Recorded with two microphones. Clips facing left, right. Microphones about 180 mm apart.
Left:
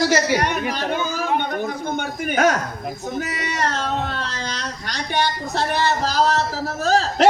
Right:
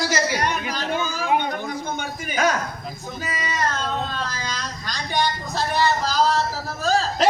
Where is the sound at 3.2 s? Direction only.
70° left (ahead or behind).